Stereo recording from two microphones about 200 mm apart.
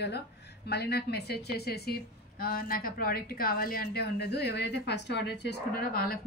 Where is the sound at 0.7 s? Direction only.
55° left (ahead or behind).